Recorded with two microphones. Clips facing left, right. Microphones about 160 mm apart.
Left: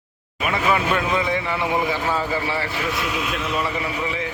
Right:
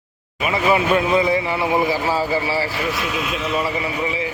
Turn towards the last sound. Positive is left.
turn(degrees=-5)  # may be behind; listen again after turning